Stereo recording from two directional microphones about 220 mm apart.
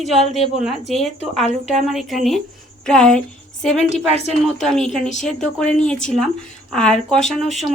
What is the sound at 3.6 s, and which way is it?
Speech, 30° left (ahead or behind).